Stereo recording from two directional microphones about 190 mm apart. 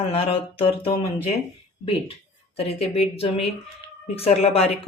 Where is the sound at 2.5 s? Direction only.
30° left (ahead or behind).